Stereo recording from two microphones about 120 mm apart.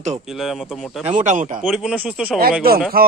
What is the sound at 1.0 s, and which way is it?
Speech, 85° right.